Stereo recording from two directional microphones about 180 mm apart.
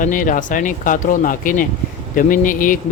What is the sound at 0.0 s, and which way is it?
Speech, 45° left (ahead or behind).